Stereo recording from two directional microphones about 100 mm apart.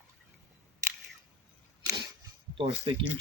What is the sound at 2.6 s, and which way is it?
Speech, 55° right (ahead or behind).